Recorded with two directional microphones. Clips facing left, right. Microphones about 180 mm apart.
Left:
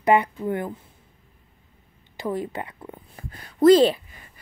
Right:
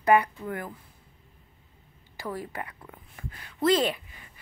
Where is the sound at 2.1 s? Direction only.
20° left (ahead or behind).